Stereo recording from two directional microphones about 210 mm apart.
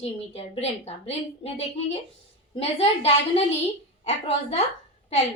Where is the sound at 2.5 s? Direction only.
30° left (ahead or behind).